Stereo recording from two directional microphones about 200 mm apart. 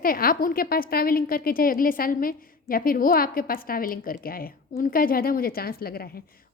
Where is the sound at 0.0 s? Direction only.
45° left (ahead or behind).